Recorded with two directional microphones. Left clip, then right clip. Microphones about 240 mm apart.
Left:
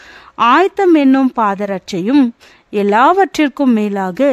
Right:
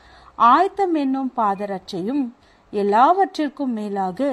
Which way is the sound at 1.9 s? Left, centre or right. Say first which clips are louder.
Left 13 dB; left.